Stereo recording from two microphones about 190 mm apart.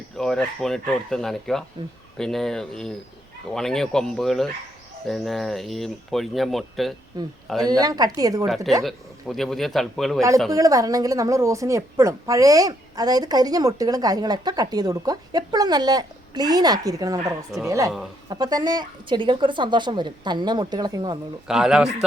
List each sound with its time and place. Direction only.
0.2 s speech: 5° left (ahead or behind)
7.7 s a woman's voice: 20° right (ahead or behind)
8.4 s speech: centre (ahead or behind)
10.5 s a woman's voice: 20° right (ahead or behind)
21.4 s speech: 5° right (ahead or behind)